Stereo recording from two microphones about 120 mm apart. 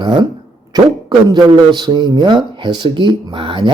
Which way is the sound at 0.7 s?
35° right (ahead or behind).